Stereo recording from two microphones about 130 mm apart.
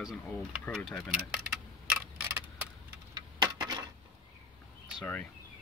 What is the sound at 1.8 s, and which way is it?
Tick, 10° right (ahead or behind).